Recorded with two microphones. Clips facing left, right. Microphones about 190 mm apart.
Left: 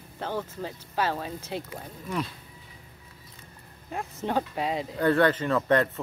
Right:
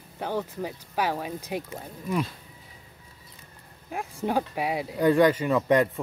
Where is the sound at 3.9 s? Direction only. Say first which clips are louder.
Right 1 dB; 10° right (ahead or behind).